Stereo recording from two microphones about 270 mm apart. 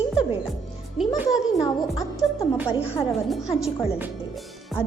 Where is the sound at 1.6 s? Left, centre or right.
Centre.